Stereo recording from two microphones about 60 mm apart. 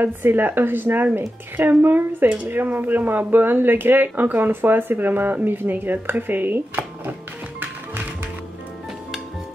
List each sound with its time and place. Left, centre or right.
0.0 s speech: right